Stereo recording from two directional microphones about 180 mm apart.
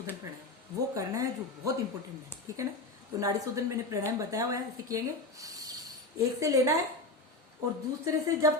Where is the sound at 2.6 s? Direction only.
20° right (ahead or behind).